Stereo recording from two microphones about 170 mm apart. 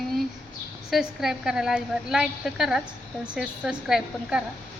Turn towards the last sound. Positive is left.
turn(degrees=-5)  # may be behind; listen again after turning